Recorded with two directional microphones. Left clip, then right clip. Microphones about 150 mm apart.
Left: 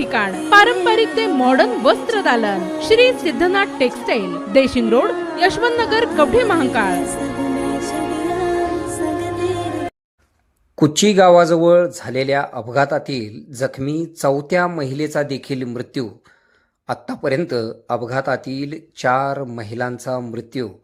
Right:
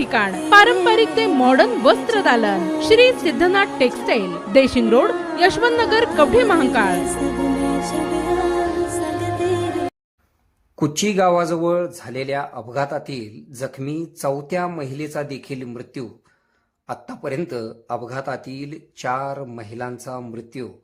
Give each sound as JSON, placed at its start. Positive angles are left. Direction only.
{"t": 0.0, "sound": "a woman's voice", "side_deg": 0}
{"t": 10.8, "sound": "speech", "side_deg": 25}